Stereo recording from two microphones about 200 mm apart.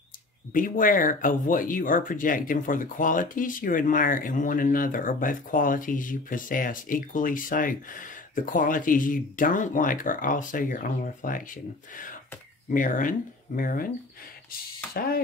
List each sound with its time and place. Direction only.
0.5 s speech: 45° left (ahead or behind)